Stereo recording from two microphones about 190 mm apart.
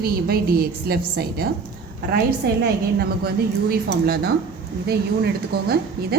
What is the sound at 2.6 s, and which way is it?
A woman's voice, 55° right (ahead or behind).